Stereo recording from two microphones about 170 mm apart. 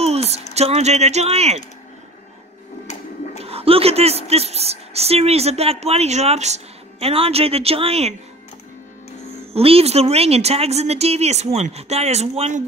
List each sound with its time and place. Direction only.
0.0 s speech: 35° right (ahead or behind)
3.4 s a woman's voice: 35° right (ahead or behind)
9.5 s a woman's voice: 35° right (ahead or behind)